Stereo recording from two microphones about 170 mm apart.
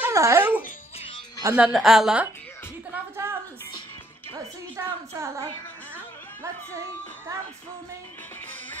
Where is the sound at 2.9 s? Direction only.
15° right (ahead or behind).